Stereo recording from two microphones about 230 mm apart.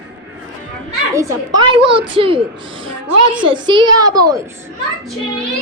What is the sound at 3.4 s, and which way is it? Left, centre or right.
A child's voice, right.